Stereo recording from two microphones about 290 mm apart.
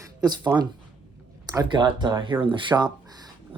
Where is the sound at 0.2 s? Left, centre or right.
Centre.